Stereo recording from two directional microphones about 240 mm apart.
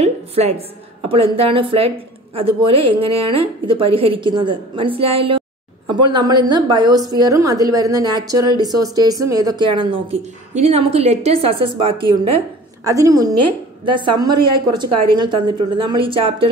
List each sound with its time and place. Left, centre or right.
0.0 s a woman's voice: right